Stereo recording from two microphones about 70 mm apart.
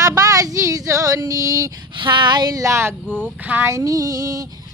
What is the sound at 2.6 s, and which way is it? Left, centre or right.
Speech, right.